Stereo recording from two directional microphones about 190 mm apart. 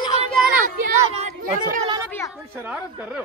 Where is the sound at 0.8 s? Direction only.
40° right (ahead or behind).